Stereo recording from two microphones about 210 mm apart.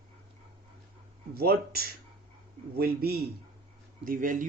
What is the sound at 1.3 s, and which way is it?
Speech, 50° right (ahead or behind).